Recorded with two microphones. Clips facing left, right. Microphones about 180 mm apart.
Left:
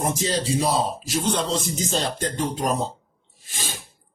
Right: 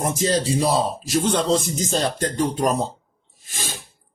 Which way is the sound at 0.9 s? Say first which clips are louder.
Right 3 dB; 45° right (ahead or behind).